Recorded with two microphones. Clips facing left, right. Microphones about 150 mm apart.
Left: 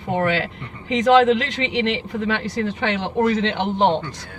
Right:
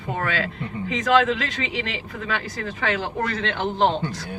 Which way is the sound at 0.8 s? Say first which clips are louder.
Left 5 dB; 25° left (ahead or behind).